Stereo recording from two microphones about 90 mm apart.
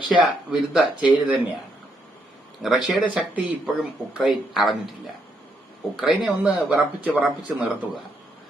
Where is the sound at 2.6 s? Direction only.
Centre (ahead or behind).